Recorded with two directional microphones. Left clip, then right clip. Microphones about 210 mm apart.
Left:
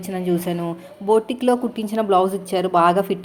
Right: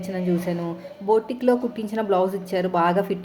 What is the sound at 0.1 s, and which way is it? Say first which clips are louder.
A woman's voice: left 3 dB; 20° left (ahead or behind).